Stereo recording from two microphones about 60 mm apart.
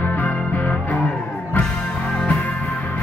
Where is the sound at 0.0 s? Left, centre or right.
Left.